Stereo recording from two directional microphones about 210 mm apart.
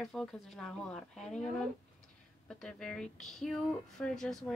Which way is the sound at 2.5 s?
5° left (ahead or behind).